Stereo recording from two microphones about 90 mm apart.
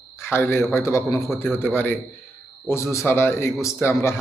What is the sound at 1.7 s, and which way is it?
A man's voice, 25° left (ahead or behind).